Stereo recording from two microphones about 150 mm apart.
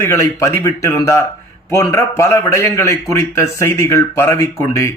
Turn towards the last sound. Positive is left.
turn(degrees=20)  # may be behind; listen again after turning